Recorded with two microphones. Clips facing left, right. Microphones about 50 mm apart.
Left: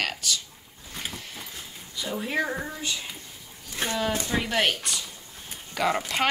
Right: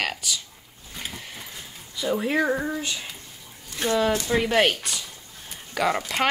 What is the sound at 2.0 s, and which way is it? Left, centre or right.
Speech, centre.